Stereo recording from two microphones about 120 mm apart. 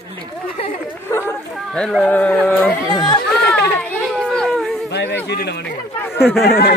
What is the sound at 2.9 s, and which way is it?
Speech, 35° left (ahead or behind).